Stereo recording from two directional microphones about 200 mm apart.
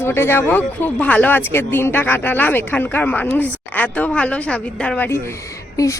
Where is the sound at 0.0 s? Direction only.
10° left (ahead or behind).